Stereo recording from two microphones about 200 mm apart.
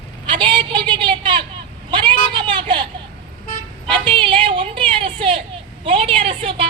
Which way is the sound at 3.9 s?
25° right (ahead or behind).